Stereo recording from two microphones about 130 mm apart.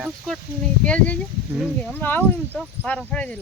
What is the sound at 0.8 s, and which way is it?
Speech, 10° left (ahead or behind).